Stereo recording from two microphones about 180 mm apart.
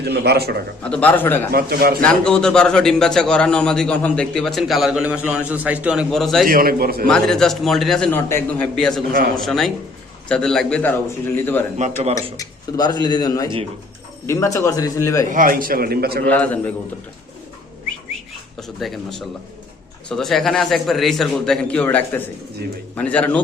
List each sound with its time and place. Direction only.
0.0 s a man's voice: 65° right (ahead or behind)
0.8 s a man's voice: 5° left (ahead or behind)
1.5 s a man's voice: 60° right (ahead or behind)
2.0 s a man's voice: 5° left (ahead or behind)
6.5 s a man's voice: 55° right (ahead or behind)
7.1 s a man's voice: 5° left (ahead or behind)
9.1 s a man's voice: 55° right (ahead or behind)
9.4 s a man's voice: centre (ahead or behind)
11.8 s speech: 40° right (ahead or behind)
12.4 s a man's voice: 20° left (ahead or behind)
15.3 s a man's voice: 50° right (ahead or behind)
16.2 s a man's voice: 10° left (ahead or behind)
20.1 s a man's voice: centre (ahead or behind)